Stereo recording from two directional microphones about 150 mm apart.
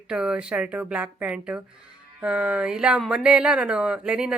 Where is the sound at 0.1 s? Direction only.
5° right (ahead or behind).